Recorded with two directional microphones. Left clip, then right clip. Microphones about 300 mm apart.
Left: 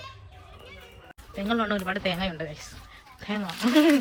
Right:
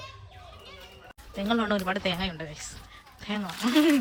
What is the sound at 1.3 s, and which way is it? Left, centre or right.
Speech, centre.